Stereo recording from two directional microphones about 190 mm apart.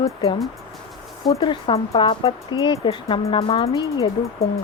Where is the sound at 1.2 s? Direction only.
20° left (ahead or behind).